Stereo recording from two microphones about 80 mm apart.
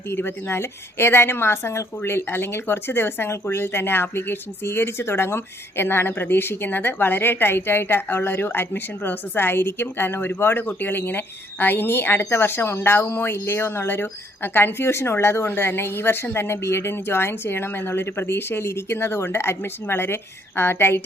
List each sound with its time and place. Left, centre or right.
0.1 s a woman's voice: left